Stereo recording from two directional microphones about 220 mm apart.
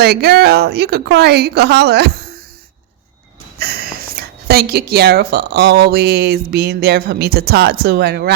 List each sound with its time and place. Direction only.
0.0 s speech: 45° right (ahead or behind)
3.6 s speech: 45° right (ahead or behind)